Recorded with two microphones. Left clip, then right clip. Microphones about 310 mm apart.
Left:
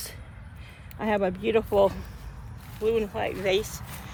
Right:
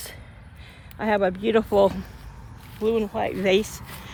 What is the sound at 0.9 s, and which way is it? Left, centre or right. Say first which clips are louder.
Speech: right 4 dB; right.